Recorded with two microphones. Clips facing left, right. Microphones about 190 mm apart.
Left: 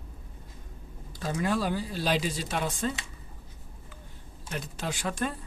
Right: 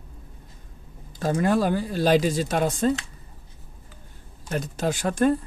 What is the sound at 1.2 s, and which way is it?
Speech, 50° right (ahead or behind).